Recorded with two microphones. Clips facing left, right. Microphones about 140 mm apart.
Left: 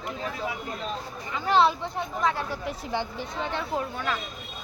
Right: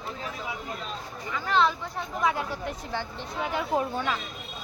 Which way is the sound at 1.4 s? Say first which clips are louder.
Left 3 dB; 30° left (ahead or behind).